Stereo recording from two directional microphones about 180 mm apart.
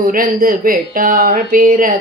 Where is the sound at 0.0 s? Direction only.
50° right (ahead or behind).